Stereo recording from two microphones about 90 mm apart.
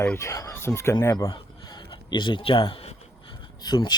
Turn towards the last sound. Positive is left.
turn(degrees=50)  # may be behind; listen again after turning